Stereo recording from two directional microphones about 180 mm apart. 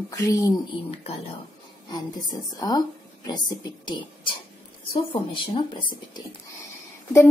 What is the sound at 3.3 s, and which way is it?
Speech, 25° left (ahead or behind).